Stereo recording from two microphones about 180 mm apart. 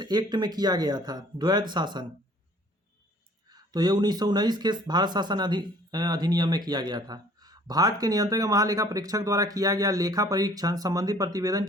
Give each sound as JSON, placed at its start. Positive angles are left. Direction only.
{"t": 0.0, "sound": "speech", "side_deg": -25}
{"t": 3.5, "sound": "speech", "side_deg": -20}